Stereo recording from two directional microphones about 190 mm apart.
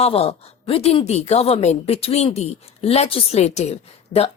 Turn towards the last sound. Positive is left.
turn(degrees=35)  # may be behind; listen again after turning